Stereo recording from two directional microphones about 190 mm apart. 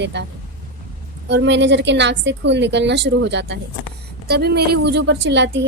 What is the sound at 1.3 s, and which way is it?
A woman's voice, 70° right (ahead or behind).